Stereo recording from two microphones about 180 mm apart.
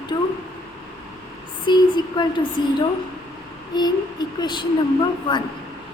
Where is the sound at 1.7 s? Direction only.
25° left (ahead or behind).